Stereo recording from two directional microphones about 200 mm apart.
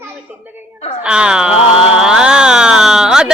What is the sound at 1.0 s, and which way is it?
Speech, 5° right (ahead or behind).